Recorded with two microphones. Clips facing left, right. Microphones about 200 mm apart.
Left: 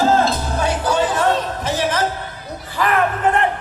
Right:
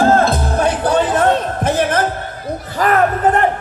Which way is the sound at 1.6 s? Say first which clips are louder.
Right 4 dB; 55° right (ahead or behind).